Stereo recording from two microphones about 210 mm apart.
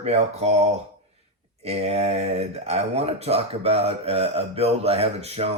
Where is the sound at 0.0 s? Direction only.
30° right (ahead or behind).